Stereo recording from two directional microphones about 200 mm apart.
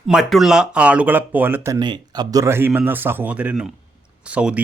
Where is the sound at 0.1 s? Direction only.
Centre (ahead or behind).